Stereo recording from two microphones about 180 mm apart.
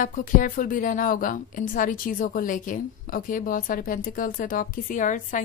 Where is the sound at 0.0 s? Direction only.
50° left (ahead or behind).